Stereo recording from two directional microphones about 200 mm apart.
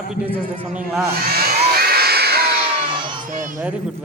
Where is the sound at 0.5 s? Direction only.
30° right (ahead or behind).